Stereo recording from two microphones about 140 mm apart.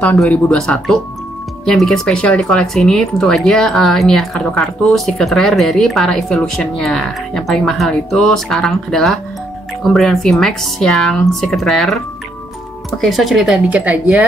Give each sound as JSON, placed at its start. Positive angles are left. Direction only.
{"t": 0.2, "sound": "speech", "side_deg": 5}
{"t": 13.0, "sound": "speech", "side_deg": 0}